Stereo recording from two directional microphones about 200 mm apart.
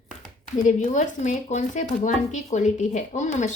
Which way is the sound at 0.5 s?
40° left (ahead or behind).